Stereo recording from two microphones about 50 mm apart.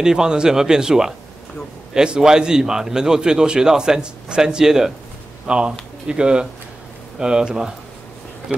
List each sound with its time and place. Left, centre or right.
0.0 s a man's voice: centre